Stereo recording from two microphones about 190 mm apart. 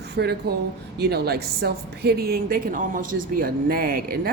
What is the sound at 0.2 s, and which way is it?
A woman's voice, 55° right (ahead or behind).